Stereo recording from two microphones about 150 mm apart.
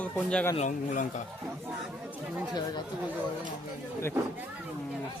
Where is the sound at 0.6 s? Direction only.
55° left (ahead or behind).